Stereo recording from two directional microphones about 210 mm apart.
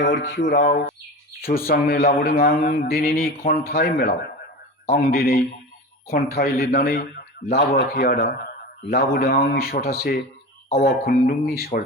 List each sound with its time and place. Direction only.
0.0 s a sound: 55° left (ahead or behind)
0.5 s a man's voice: 40° left (ahead or behind)
7.4 s speech: 30° left (ahead or behind)
7.8 s a man's voice: 45° left (ahead or behind)